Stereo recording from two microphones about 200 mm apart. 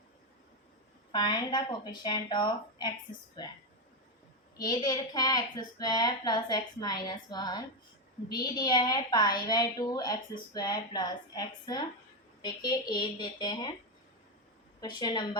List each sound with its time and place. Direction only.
1.1 s a woman's voice: 20° left (ahead or behind)
4.6 s a woman's voice: 20° left (ahead or behind)
12.9 s a woman's voice: 20° left (ahead or behind)
14.8 s a woman's voice: 20° left (ahead or behind)